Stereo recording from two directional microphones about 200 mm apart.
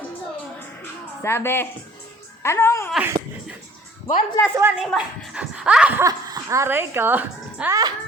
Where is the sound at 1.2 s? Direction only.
10° left (ahead or behind).